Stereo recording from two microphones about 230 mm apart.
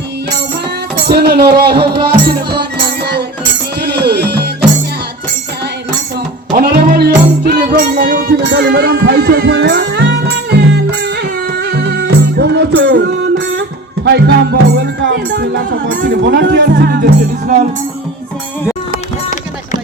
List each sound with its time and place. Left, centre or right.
1.0 s speech: right
2.2 s music: right
6.5 s music: right
16.7 s speech: right